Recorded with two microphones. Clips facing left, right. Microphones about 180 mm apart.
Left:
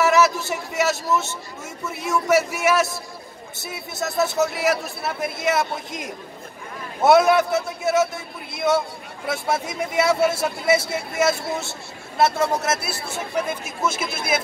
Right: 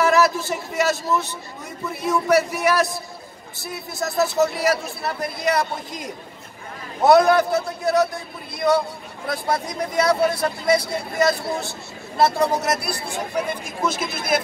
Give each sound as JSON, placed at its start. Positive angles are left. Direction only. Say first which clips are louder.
{"t": 0.0, "sound": "a sound", "louder": "even", "side_deg": 0}
{"t": 1.9, "sound": "a man's voice", "louder": "right 1 dB", "side_deg": 5}
{"t": 13.0, "sound": "speech", "louder": "right 1 dB", "side_deg": -15}
{"t": 13.5, "sound": "a man's voice", "louder": "right 1 dB", "side_deg": 10}